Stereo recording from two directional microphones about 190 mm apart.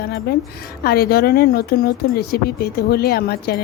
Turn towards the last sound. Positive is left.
turn(degrees=55)  # may be behind; listen again after turning